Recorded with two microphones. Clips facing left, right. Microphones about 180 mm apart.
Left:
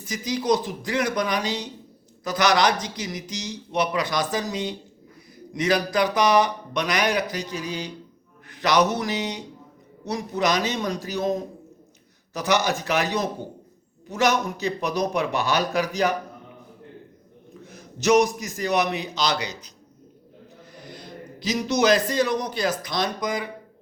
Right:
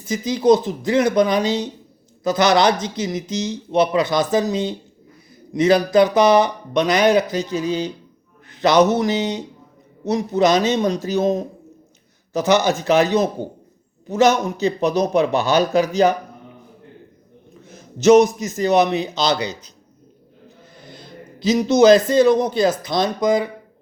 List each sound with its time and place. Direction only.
0.0 s speech: 25° right (ahead or behind)
17.7 s speech: 25° right (ahead or behind)
20.7 s a man's voice: 25° right (ahead or behind)